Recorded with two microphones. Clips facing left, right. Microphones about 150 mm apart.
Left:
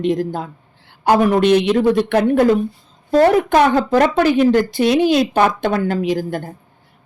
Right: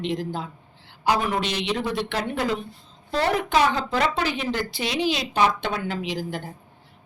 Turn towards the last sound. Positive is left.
turn(degrees=50)  # may be behind; listen again after turning